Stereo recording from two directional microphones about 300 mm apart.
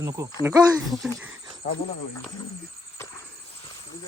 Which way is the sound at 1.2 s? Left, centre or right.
Centre.